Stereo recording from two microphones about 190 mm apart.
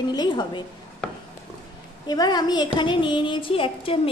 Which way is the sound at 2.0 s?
20° left (ahead or behind).